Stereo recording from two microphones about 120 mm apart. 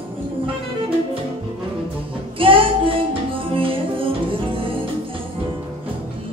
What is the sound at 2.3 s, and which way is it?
Music, 45° right (ahead or behind).